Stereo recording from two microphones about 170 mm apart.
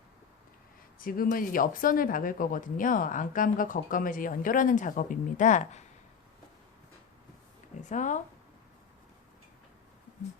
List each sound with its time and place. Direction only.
0.9 s speech: 55° left (ahead or behind)
7.8 s speech: 45° left (ahead or behind)